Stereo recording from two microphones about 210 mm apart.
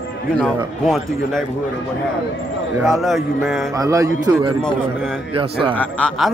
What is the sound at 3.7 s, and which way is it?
Speech, 15° right (ahead or behind).